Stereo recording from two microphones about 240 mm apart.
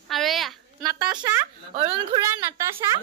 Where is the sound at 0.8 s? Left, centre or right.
Centre.